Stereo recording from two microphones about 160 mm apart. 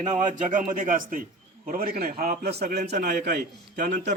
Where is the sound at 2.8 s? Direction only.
50° right (ahead or behind).